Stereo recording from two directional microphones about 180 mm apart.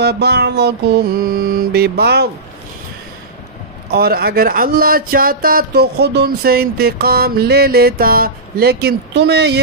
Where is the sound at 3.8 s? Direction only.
60° right (ahead or behind).